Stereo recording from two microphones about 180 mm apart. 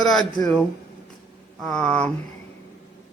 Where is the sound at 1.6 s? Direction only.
5° left (ahead or behind).